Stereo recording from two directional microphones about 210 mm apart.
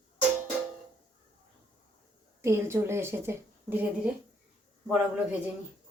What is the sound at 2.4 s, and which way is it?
A woman's voice, 10° right (ahead or behind).